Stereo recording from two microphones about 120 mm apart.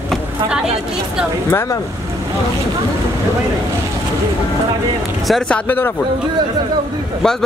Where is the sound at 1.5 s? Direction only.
30° left (ahead or behind).